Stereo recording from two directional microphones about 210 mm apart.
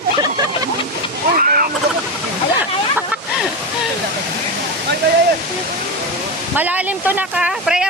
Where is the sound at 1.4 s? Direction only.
40° right (ahead or behind).